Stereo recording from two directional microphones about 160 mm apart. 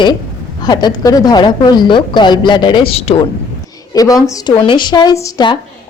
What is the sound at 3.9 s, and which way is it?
A woman's voice, 20° left (ahead or behind).